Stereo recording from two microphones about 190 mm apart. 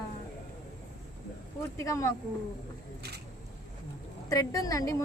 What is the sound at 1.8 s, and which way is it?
Speech, 15° left (ahead or behind).